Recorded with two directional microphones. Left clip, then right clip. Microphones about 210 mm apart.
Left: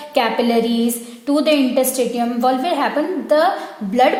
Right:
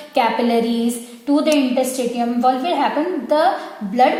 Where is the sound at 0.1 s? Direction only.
40° left (ahead or behind).